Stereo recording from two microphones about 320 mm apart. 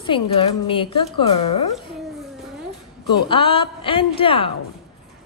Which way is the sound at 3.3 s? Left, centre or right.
Centre.